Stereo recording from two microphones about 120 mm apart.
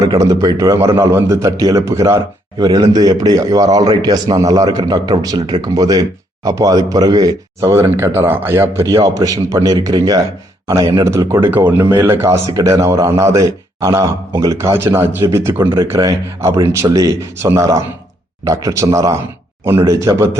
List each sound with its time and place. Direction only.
0.1 s a man's voice: 30° right (ahead or behind)
15.8 s a man's voice: 30° right (ahead or behind)